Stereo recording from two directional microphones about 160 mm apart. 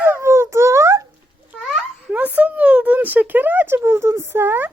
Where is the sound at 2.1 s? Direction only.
10° right (ahead or behind).